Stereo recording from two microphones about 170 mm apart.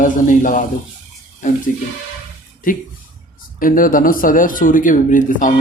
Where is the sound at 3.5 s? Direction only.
55° left (ahead or behind).